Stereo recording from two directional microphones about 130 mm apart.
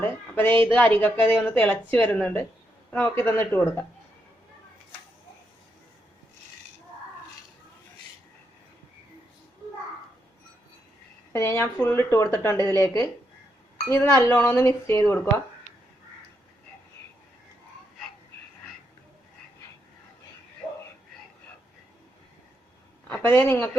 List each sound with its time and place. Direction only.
0.0 s a woman's voice: 15° left (ahead or behind)
11.3 s a woman's voice: 20° left (ahead or behind)
23.2 s speech: 15° left (ahead or behind)